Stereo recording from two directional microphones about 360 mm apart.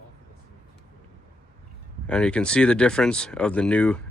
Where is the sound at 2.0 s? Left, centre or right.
Centre.